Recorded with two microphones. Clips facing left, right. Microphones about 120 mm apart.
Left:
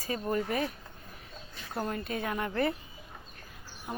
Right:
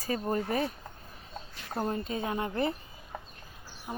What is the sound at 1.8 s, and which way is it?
Speech, 25° right (ahead or behind).